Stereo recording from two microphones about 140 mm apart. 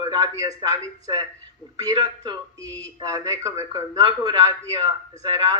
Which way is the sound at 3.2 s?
20° right (ahead or behind).